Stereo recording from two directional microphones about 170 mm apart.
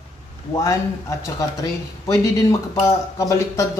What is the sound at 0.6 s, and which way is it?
Speech, 20° left (ahead or behind).